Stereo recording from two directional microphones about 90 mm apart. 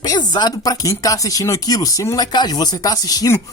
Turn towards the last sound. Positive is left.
turn(degrees=45)  # may be behind; listen again after turning